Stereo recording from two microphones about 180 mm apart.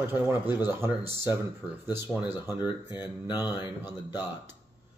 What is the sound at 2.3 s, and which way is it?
Speech, 10° right (ahead or behind).